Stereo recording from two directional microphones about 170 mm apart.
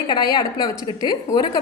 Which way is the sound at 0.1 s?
25° left (ahead or behind).